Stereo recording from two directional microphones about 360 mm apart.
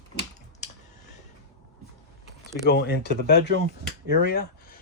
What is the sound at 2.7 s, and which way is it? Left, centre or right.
Speech, left.